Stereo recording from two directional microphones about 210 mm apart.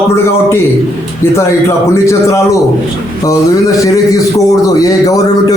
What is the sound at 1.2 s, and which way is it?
A man's voice, 10° left (ahead or behind).